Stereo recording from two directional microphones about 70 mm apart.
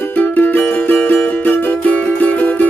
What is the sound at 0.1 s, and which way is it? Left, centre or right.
Music, left.